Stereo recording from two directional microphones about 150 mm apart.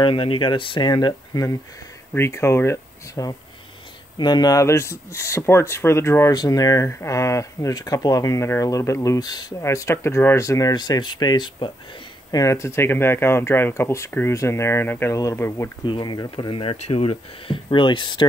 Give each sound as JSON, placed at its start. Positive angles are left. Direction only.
{"t": 0.0, "sound": "speech", "side_deg": 35}
{"t": 15.8, "sound": "speech", "side_deg": 30}